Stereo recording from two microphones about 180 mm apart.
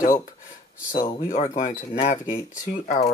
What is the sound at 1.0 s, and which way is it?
Speech, 40° left (ahead or behind).